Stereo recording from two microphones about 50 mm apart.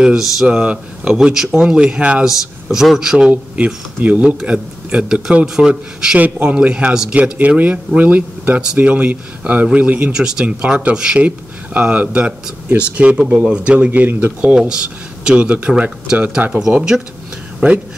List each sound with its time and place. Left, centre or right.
0.0 s a man's voice: centre
0.5 s a man's voice: centre
2.2 s a man's voice: centre
3.5 s speech: right
4.5 s a man's voice: centre
6.1 s a man's voice: right; by 7.2 s centre
7.3 s speech: right
10.1 s a man's voice: centre
10.4 s speech: right
14.4 s speech: centre; by 16.5 s right
16.7 s a man's voice: centre
17.6 s speech: right